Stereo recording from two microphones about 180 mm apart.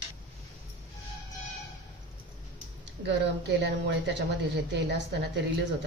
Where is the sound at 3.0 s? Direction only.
70° right (ahead or behind).